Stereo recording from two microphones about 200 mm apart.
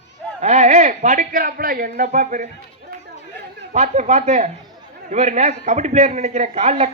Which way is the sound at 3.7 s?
35° right (ahead or behind).